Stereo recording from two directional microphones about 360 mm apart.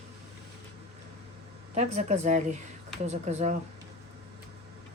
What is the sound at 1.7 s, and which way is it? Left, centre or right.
A woman's voice, centre.